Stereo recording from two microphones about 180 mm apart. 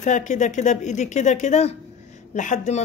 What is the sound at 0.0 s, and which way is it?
A woman's voice, 45° left (ahead or behind).